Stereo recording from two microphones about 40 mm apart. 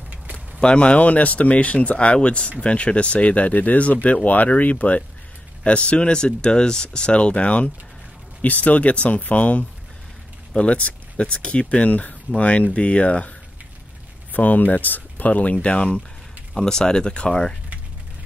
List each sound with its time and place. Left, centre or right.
0.6 s speech: left
14.3 s speech: left
16.5 s speech: centre